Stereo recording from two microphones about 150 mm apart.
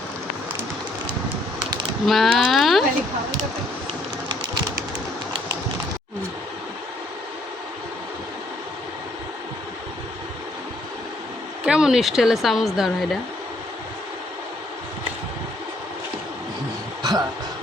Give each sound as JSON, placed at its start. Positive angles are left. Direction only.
{"t": 2.0, "sound": "speech", "side_deg": 0}
{"t": 11.6, "sound": "a woman's voice", "side_deg": -5}
{"t": 17.0, "sound": "throat clearing", "side_deg": -25}